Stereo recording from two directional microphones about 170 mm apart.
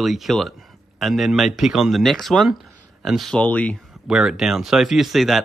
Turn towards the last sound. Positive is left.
turn(degrees=0)  # may be behind; listen again after turning